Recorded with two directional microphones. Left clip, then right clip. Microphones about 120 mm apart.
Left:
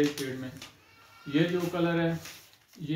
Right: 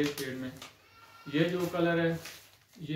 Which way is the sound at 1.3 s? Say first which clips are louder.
Left 2 dB; 30° right (ahead or behind).